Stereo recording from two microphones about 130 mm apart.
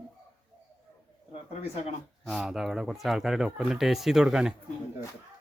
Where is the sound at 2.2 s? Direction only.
Centre (ahead or behind).